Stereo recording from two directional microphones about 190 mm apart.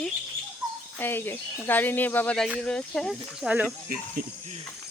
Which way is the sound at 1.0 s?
10° left (ahead or behind).